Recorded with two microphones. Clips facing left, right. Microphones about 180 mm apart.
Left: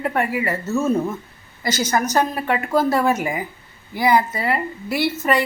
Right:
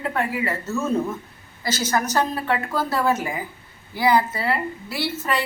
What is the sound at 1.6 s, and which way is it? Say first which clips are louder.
A woman's voice: left 3 dB; 15° left (ahead or behind).